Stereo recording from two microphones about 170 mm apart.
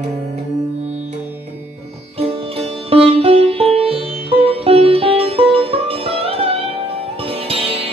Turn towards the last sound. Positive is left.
turn(degrees=-35)  # may be behind; listen again after turning